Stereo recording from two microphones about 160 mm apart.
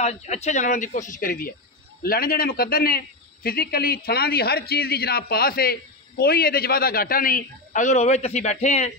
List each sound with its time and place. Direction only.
0.0 s a man's voice: 45° left (ahead or behind)